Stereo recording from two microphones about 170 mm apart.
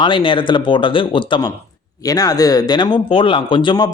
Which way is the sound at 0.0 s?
30° left (ahead or behind).